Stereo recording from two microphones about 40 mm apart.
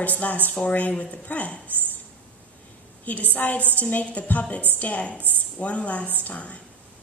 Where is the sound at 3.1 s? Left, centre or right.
Left.